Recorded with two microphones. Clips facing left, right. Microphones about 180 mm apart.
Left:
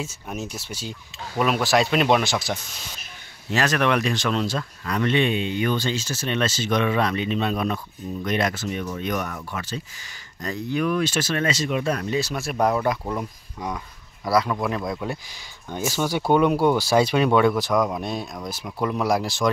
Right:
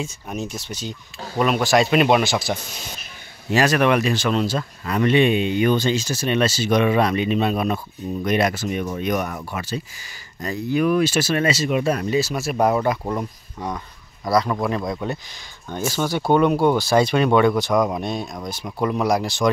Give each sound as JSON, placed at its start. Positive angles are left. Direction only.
{"t": 0.0, "sound": "speech", "side_deg": 5}